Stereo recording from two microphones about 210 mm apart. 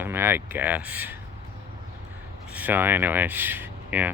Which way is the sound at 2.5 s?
10° right (ahead or behind).